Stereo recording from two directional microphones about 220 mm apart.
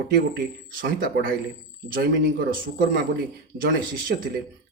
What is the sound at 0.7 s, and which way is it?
Speech, 40° right (ahead or behind).